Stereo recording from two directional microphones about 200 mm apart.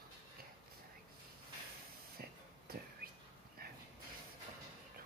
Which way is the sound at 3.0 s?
50° right (ahead or behind).